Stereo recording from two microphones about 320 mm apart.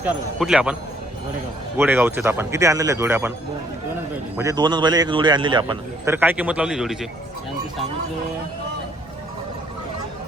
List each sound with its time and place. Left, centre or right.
0.0 s speech: centre
1.8 s a man's voice: centre
4.4 s a man's voice: centre